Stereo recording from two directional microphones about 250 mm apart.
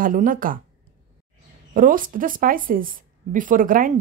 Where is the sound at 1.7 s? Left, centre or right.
Right.